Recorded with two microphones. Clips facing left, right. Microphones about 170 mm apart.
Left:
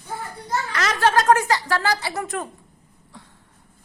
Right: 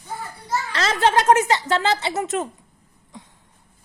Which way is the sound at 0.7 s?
25° right (ahead or behind).